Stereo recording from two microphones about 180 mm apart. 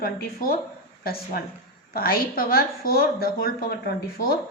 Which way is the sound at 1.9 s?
55° left (ahead or behind).